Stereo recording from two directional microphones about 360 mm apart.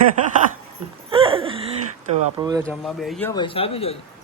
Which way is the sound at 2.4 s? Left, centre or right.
Centre.